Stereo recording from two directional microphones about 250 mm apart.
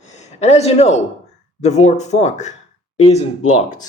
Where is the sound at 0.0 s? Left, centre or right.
Left.